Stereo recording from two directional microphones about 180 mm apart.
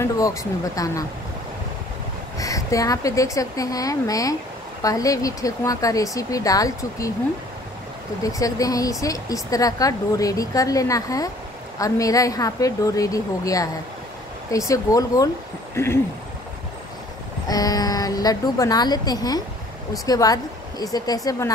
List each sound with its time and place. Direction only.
0.0 s speech: 15° left (ahead or behind)
2.3 s speech: 20° left (ahead or behind)
8.2 s speech: 20° left (ahead or behind)
15.7 s a sound: 15° left (ahead or behind)
17.5 s speech: 20° left (ahead or behind)